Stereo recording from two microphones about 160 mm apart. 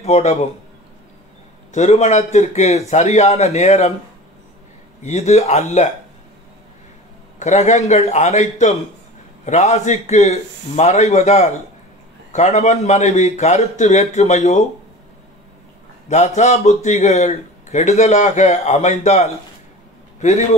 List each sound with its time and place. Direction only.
0.0 s speech: 45° left (ahead or behind)
1.7 s speech: 45° left (ahead or behind)
5.0 s speech: 45° left (ahead or behind)
7.3 s speech: 45° left (ahead or behind)
16.1 s speech: 45° left (ahead or behind)